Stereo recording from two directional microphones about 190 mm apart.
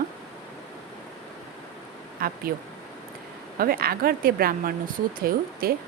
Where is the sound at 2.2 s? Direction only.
50° right (ahead or behind).